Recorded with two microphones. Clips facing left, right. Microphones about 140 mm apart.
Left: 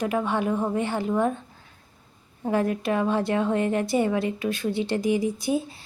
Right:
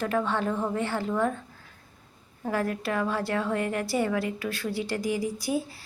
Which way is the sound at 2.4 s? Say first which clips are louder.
Left 4 dB; 20° left (ahead or behind).